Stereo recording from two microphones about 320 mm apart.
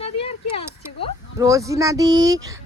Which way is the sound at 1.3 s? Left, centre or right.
Centre.